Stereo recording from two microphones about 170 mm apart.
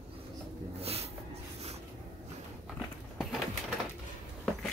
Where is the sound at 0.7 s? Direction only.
35° right (ahead or behind).